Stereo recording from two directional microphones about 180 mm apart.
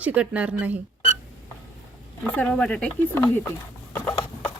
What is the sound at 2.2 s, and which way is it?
A woman's voice, 10° left (ahead or behind).